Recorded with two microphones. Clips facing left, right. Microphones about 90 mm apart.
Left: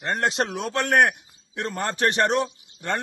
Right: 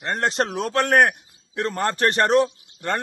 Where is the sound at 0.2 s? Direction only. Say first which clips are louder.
Right 4 dB; 40° right (ahead or behind).